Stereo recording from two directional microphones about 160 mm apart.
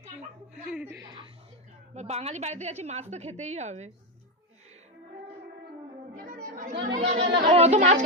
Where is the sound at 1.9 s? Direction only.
45° right (ahead or behind).